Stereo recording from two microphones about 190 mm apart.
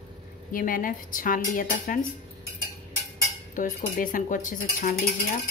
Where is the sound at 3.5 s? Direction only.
45° left (ahead or behind).